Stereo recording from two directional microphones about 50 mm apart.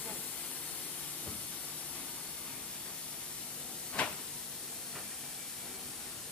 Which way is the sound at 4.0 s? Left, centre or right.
Left.